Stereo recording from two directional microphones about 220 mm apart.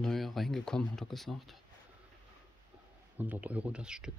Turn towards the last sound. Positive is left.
turn(degrees=-5)  # may be behind; listen again after turning